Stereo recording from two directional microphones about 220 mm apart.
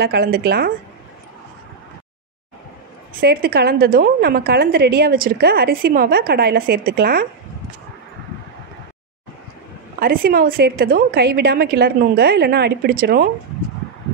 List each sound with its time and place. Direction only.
0.0 s a woman's voice: 45° right (ahead or behind)
3.2 s a woman's voice: 45° right (ahead or behind)
9.9 s a woman's voice: 40° right (ahead or behind)